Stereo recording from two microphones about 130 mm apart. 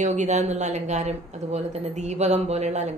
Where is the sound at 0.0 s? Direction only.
65° right (ahead or behind).